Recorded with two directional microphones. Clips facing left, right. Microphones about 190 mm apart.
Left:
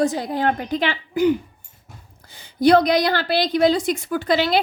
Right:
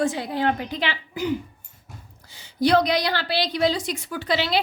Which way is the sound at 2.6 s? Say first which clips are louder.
Left 4 dB; 50° left (ahead or behind).